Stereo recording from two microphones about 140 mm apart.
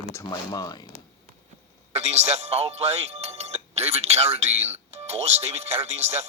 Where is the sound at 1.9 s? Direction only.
50° right (ahead or behind).